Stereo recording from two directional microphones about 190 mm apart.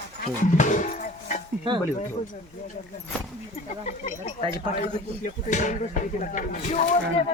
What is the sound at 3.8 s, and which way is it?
Speech, 35° left (ahead or behind).